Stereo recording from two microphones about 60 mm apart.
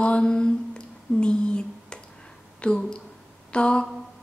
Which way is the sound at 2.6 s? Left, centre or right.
Centre.